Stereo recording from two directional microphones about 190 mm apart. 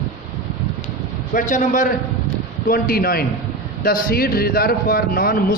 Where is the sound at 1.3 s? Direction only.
45° left (ahead or behind).